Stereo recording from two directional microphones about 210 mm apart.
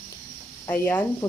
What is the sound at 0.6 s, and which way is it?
Speech, 10° left (ahead or behind).